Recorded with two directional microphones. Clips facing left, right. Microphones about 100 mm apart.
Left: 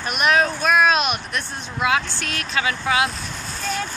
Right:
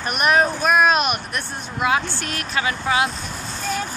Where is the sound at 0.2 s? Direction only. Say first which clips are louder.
Right 1 dB; 15° right (ahead or behind).